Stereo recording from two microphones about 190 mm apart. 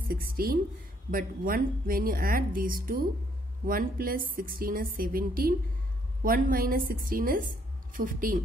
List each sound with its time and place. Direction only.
0.1 s a woman's voice: 50° right (ahead or behind)